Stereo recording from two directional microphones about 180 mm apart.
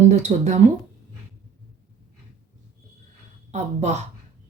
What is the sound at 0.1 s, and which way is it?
Speech, 40° right (ahead or behind).